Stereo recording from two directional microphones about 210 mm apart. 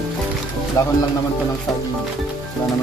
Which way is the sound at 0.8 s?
15° left (ahead or behind).